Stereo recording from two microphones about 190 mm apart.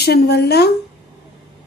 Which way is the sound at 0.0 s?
55° left (ahead or behind).